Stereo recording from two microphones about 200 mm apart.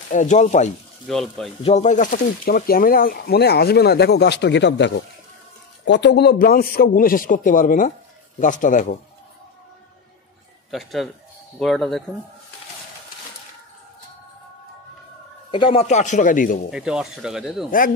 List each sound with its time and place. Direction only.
0.1 s speech: 40° left (ahead or behind)
1.0 s speech: centre (ahead or behind)
1.6 s speech: 30° left (ahead or behind)
10.7 s speech: centre (ahead or behind)
15.5 s speech: 25° left (ahead or behind)
16.7 s speech: 5° right (ahead or behind)
17.6 s speech: 45° left (ahead or behind)